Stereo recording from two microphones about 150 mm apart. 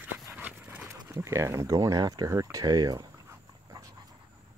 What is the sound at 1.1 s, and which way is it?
Speech, 20° right (ahead or behind).